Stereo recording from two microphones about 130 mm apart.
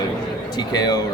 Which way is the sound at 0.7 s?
30° left (ahead or behind).